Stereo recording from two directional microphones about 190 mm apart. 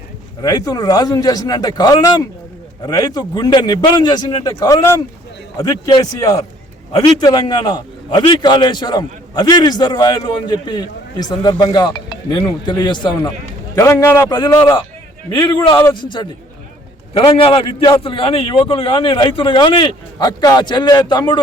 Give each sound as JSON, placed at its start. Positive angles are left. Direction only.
{"t": 0.4, "sound": "a man's voice", "side_deg": 20}